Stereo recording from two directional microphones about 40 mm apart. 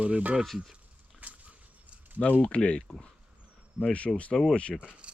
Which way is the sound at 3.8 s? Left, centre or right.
Right.